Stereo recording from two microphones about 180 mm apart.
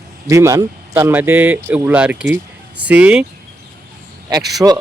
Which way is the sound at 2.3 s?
10° right (ahead or behind).